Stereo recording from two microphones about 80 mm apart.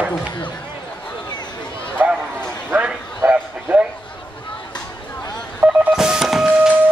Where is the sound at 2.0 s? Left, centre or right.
Right.